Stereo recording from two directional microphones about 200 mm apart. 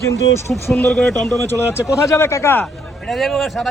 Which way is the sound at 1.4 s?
15° left (ahead or behind).